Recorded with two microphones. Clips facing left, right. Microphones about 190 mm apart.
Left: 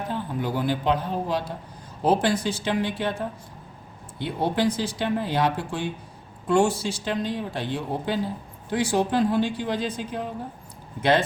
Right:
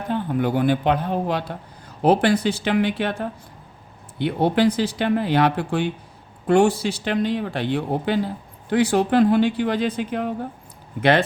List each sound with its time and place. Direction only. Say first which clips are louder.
0.1 s speech: right 8 dB; 60° right (ahead or behind)